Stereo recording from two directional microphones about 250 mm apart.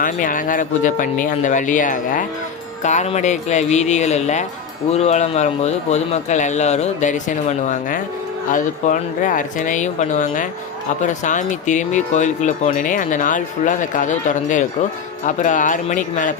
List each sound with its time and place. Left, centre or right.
0.0 s speech: left